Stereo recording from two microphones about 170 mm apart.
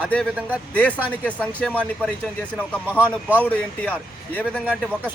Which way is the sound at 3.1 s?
10° right (ahead or behind).